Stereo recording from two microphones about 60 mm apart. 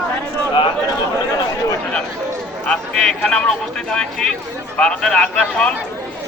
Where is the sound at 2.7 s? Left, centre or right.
Centre.